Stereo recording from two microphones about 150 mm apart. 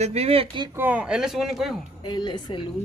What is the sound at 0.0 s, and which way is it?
Speech, 45° right (ahead or behind).